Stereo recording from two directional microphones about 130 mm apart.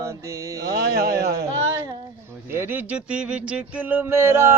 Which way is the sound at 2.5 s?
15° right (ahead or behind).